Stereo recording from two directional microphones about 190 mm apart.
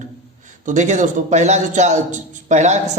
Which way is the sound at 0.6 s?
40° right (ahead or behind).